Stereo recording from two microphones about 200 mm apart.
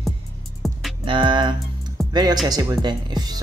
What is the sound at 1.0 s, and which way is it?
Music, 25° right (ahead or behind).